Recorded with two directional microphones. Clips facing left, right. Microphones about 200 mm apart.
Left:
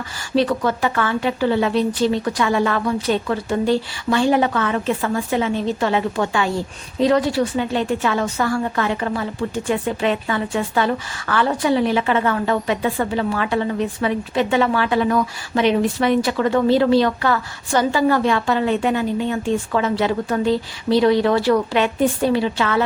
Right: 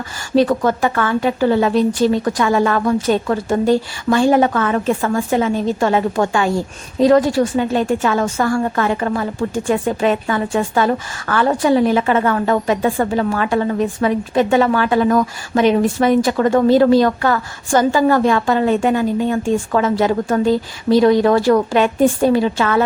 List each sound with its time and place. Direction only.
0.3 s a woman's voice: 45° right (ahead or behind)